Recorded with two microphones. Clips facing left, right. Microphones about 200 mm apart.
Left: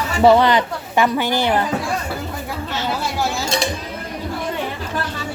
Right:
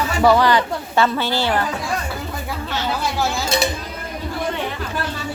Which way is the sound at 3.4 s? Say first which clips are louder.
Right 1 dB; 5° right (ahead or behind).